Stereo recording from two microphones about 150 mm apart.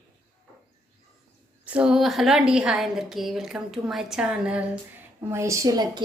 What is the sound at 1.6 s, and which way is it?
A woman's voice, 5° right (ahead or behind).